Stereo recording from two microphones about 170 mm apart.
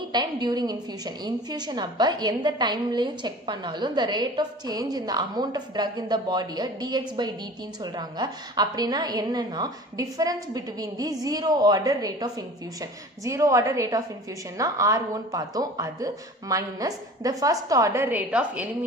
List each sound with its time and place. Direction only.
0.1 s a woman's voice: 25° right (ahead or behind); by 18.9 s 10° right (ahead or behind)